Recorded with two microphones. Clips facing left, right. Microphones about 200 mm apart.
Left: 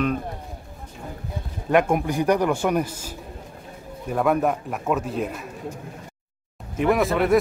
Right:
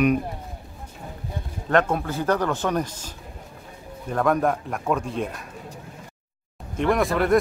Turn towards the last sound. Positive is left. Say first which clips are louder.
# left 1 dB
turn(degrees=0)  # may be behind; listen again after turning